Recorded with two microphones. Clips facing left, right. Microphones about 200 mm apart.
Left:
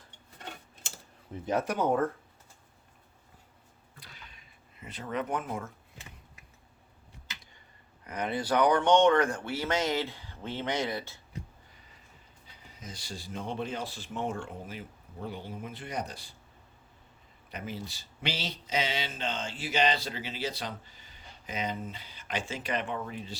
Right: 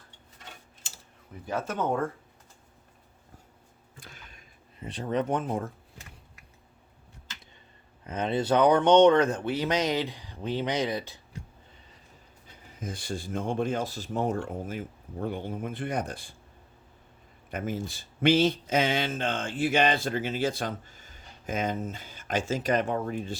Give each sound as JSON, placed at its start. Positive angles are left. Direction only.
{"t": 0.3, "sound": "tick-tock", "side_deg": 60}
{"t": 1.5, "sound": "speech", "side_deg": 15}
{"t": 4.0, "sound": "a sound", "side_deg": -50}
{"t": 4.8, "sound": "speech", "side_deg": -30}
{"t": 8.0, "sound": "speech", "side_deg": -25}
{"t": 12.5, "sound": "speech", "side_deg": -50}
{"t": 17.5, "sound": "speech", "side_deg": -50}